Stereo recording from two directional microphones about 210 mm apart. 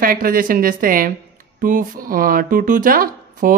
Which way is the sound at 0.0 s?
40° right (ahead or behind).